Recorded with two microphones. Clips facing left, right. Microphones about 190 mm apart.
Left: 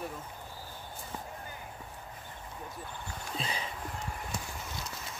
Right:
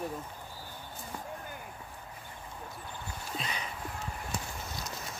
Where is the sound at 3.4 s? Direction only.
30° left (ahead or behind).